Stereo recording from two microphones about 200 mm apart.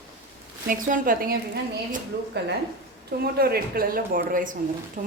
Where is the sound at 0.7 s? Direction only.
40° right (ahead or behind).